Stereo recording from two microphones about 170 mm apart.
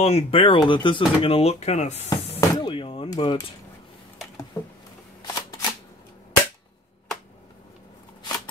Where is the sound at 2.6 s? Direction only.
30° left (ahead or behind).